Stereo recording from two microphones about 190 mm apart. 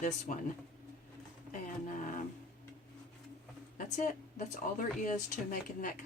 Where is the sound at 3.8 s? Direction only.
45° left (ahead or behind).